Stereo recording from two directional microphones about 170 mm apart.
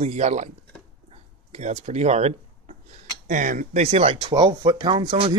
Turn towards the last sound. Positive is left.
turn(degrees=-30)  # may be behind; listen again after turning